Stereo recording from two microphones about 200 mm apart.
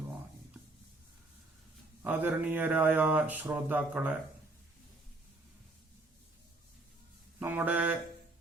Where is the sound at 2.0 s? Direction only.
10° right (ahead or behind).